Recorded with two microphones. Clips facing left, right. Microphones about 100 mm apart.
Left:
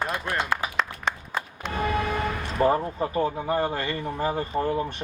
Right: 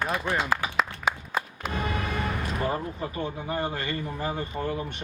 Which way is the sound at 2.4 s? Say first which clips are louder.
Left 6 dB; 35° left (ahead or behind).